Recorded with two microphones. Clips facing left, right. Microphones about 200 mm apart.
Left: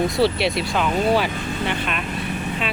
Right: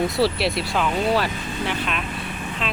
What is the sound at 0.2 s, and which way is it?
Speech, centre (ahead or behind).